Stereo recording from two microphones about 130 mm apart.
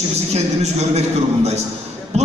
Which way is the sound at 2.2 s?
55° right (ahead or behind).